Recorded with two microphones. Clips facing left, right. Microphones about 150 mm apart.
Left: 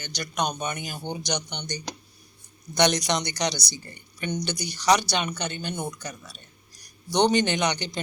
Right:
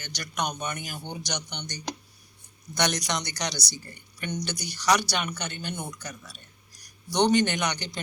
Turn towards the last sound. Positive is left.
turn(degrees=20)  # may be behind; listen again after turning